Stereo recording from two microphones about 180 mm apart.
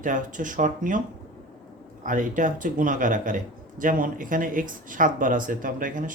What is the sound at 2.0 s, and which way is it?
Speech, 45° right (ahead or behind).